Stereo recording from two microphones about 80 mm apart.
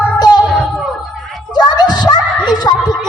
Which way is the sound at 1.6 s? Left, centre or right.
Left.